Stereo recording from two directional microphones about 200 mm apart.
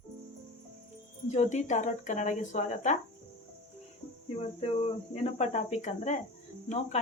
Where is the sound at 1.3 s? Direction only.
35° left (ahead or behind).